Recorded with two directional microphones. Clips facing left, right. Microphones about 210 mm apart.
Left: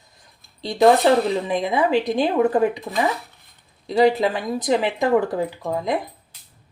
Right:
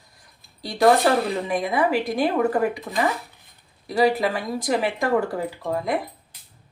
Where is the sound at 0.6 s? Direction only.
20° left (ahead or behind).